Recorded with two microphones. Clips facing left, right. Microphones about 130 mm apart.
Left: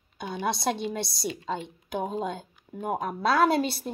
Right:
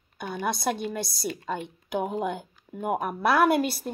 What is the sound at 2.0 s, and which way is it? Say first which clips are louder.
A woman's voice: even; 10° right (ahead or behind).